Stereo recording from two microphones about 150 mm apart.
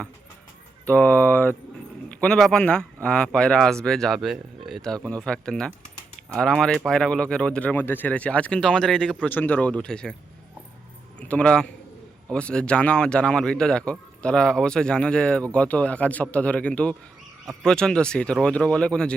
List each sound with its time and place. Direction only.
0.9 s speech: 10° left (ahead or behind)
11.2 s a man's voice: 10° left (ahead or behind)